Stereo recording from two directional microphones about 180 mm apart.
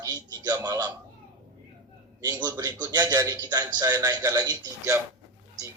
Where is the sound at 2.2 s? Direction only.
20° right (ahead or behind).